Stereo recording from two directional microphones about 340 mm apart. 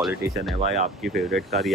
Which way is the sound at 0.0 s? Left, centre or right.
Centre.